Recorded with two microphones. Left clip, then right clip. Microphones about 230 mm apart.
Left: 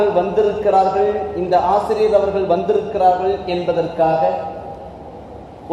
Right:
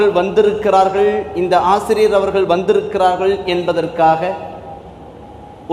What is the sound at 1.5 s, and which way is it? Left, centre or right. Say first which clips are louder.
A man's voice: right 2 dB; right.